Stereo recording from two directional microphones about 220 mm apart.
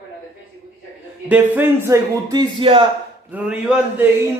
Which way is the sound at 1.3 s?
10° right (ahead or behind).